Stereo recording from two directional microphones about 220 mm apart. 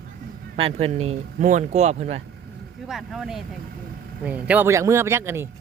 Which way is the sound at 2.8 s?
Centre (ahead or behind).